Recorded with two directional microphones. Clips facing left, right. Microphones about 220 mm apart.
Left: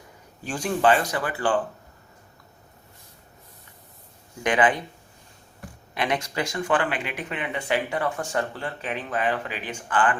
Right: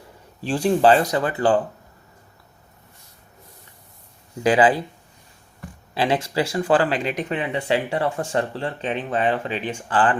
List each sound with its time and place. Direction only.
0.4 s speech: 35° right (ahead or behind)
1.0 s speech: 20° right (ahead or behind)
1.4 s speech: 40° right (ahead or behind)
4.4 s speech: 30° right (ahead or behind)
5.9 s speech: 30° right (ahead or behind)